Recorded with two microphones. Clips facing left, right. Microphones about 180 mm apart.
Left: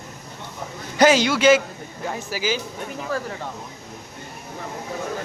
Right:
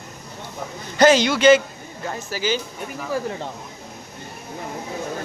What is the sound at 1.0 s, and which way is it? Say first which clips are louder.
A man's voice: right 1 dB; 10° left (ahead or behind).